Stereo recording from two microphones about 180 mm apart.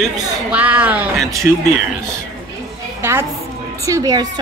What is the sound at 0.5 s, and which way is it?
Speech, 10° right (ahead or behind).